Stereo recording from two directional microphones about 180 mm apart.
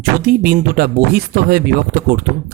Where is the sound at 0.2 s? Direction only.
55° right (ahead or behind).